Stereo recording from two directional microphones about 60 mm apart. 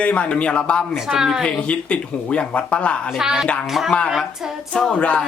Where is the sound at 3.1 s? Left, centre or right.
Centre.